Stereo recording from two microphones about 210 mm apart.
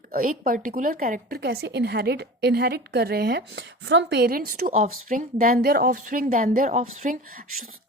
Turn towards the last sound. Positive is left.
turn(degrees=-35)  # may be behind; listen again after turning